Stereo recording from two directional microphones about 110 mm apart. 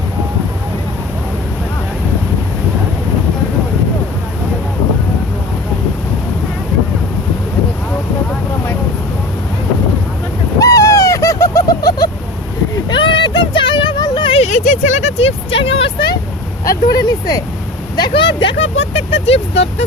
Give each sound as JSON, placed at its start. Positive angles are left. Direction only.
{"t": 10.6, "sound": "owl", "side_deg": 30}
{"t": 12.9, "sound": "a sound", "side_deg": 45}
{"t": 14.3, "sound": "vehicle", "side_deg": 80}
{"t": 16.6, "sound": "a sound", "side_deg": 35}
{"t": 17.9, "sound": "vehicle", "side_deg": 45}
{"t": 18.9, "sound": "vehicle", "side_deg": 65}